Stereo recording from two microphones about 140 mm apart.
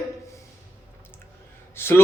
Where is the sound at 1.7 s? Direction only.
15° left (ahead or behind).